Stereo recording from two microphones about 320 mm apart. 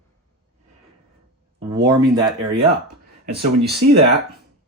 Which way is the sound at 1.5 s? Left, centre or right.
Centre.